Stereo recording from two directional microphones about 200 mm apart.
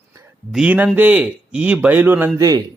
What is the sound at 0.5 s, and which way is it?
Speech, 5° right (ahead or behind).